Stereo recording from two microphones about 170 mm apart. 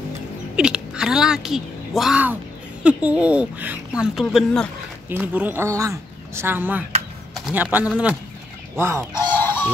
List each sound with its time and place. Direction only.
0.6 s speech: 5° right (ahead or behind)
9.1 s goose: 10° left (ahead or behind)